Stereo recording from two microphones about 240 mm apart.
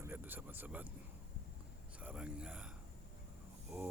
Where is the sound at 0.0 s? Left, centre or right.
Centre.